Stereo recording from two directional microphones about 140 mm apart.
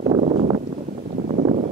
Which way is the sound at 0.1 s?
50° right (ahead or behind).